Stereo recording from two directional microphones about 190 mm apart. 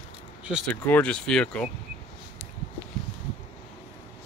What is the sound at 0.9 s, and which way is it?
Speech, 5° left (ahead or behind).